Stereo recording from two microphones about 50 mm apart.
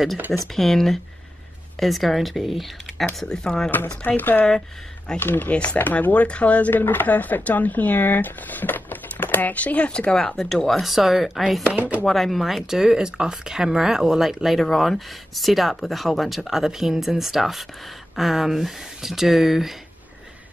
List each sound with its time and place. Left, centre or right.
0.6 s speech: centre
4.2 s speech: left
4.5 s speech: centre
5.2 s speech: left
5.5 s speech: left
6.7 s speech: left
10.1 s speech: centre
11.6 s speech: right
12.1 s speech: centre